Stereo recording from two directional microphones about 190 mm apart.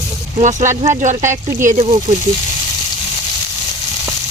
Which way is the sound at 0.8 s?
40° right (ahead or behind).